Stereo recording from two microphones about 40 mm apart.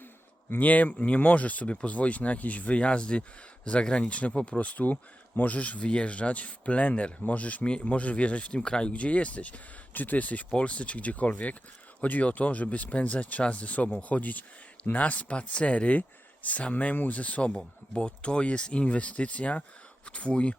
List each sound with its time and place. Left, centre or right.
0.6 s speech: left
8.9 s speech: left
17.9 s speech: left